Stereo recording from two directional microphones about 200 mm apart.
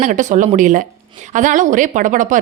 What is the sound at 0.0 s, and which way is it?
A woman's voice, 40° right (ahead or behind).